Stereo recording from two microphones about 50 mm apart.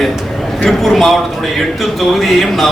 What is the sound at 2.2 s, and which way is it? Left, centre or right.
Speech, centre.